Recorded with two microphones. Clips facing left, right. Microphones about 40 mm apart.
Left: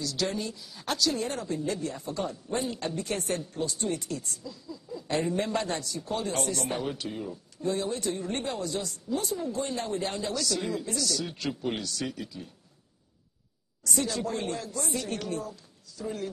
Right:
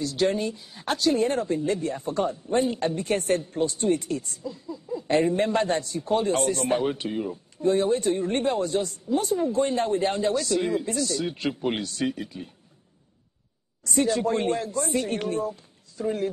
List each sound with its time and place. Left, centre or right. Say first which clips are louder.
0.0 s speech: right 7 dB; right
13.8 s a woman's voice: right 7 dB; right